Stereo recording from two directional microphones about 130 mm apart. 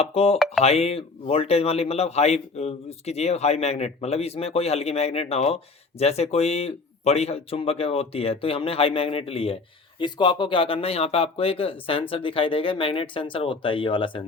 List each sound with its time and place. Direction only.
0.0 s a man's voice: 50° left (ahead or behind)
0.3 s speech: centre (ahead or behind)
0.6 s a man's voice: 55° left (ahead or behind)
10.0 s a man's voice: 35° left (ahead or behind)